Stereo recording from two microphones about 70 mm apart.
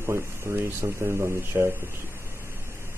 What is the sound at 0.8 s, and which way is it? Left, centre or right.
Speech, right.